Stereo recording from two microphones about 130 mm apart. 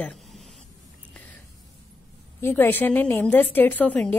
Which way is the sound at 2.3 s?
15° left (ahead or behind).